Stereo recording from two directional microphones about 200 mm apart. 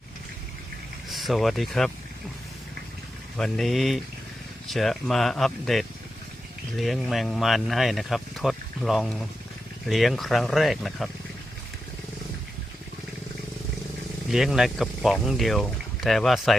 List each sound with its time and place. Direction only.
1.1 s speech: centre (ahead or behind)
3.3 s speech: centre (ahead or behind)
14.3 s speech: centre (ahead or behind)